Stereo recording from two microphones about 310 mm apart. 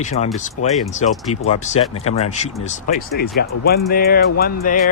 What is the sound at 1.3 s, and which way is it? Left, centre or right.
Speech, left.